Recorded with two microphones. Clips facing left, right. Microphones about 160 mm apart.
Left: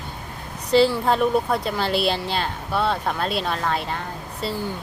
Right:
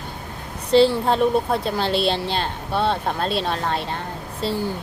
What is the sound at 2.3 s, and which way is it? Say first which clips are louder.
Speech: right 1 dB; 30° right (ahead or behind).